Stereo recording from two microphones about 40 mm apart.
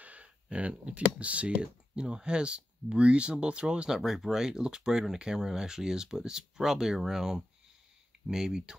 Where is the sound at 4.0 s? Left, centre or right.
Centre.